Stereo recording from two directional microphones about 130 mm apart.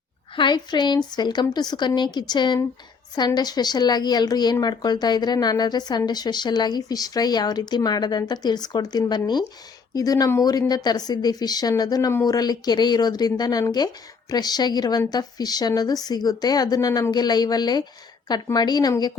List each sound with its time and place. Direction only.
0.3 s speech: 35° left (ahead or behind)